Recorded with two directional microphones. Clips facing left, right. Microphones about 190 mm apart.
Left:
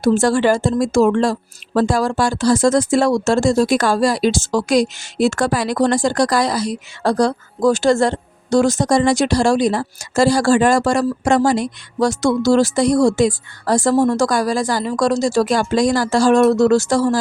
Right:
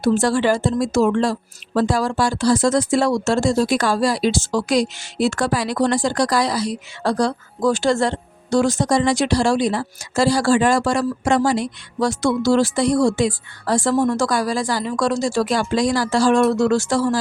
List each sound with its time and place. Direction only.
0.0 s speech: 45° left (ahead or behind)